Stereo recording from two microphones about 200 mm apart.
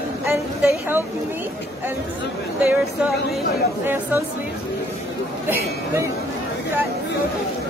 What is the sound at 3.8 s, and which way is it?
Speech, 10° right (ahead or behind).